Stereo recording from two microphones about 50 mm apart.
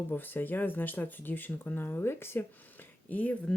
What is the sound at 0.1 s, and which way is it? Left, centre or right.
Speech, left.